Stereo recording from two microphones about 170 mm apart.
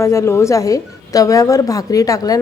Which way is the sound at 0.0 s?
15° left (ahead or behind).